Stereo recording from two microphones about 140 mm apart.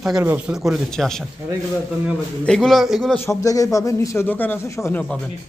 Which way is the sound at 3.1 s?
20° left (ahead or behind).